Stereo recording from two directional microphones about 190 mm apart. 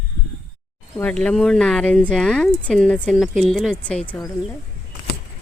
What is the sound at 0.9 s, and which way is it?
Speech, 5° left (ahead or behind).